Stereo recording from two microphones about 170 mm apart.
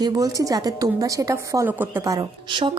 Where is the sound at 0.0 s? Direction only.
20° right (ahead or behind).